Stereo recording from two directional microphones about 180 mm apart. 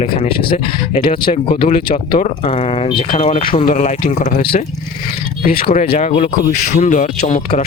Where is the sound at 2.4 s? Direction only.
30° left (ahead or behind).